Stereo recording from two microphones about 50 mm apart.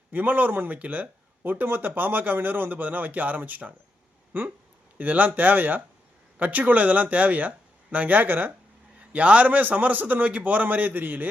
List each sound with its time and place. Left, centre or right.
0.1 s speech: right
1.5 s speech: right
9.1 s speech: right